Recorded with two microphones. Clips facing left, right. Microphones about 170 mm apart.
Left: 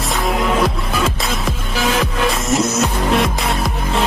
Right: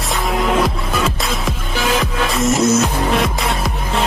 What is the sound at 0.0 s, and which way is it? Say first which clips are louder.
Music: even; centre (ahead or behind).